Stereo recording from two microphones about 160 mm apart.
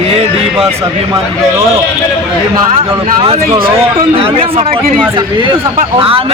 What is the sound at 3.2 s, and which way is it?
Speech, 35° right (ahead or behind).